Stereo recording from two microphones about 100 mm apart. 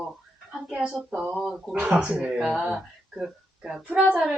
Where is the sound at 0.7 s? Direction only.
5° right (ahead or behind).